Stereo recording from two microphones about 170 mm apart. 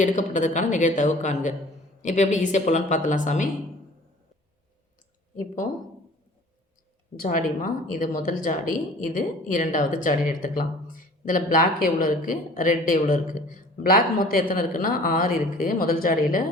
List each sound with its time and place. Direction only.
0.0 s speech: 45° left (ahead or behind)
5.4 s speech: 50° left (ahead or behind)
7.2 s speech: 55° left (ahead or behind)